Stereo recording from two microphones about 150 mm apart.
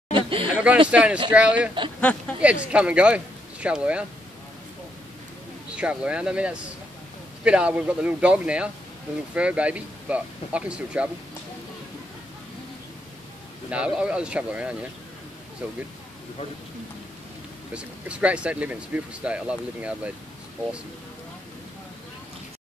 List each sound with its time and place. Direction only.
0.1 s a sound: 35° right (ahead or behind)
0.6 s speech: 10° right (ahead or behind)
2.0 s speech: 10° left (ahead or behind)
2.7 s speech: 10° right (ahead or behind)
5.8 s speech: 10° right (ahead or behind)
13.7 s speech: 10° right (ahead or behind)
17.7 s speech: 5° right (ahead or behind)